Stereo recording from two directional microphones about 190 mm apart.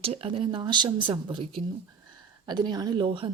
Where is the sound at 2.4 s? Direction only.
20° right (ahead or behind).